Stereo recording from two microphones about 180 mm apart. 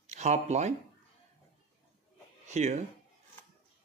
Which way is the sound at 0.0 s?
40° right (ahead or behind).